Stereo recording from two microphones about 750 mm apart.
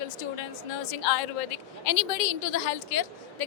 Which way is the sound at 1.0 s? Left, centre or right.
Left.